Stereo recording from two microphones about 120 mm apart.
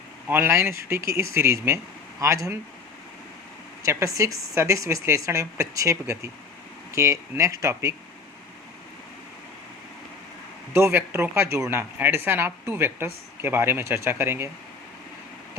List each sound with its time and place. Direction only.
0.3 s speech: 20° right (ahead or behind)
3.8 s speech: 25° right (ahead or behind)
10.8 s speech: 20° right (ahead or behind)